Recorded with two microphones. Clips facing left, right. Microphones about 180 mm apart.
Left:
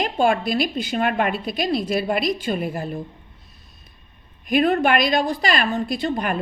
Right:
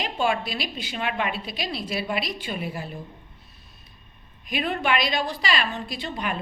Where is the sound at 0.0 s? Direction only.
50° left (ahead or behind).